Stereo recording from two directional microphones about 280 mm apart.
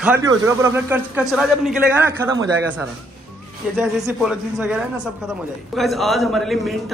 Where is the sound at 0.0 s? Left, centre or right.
Centre.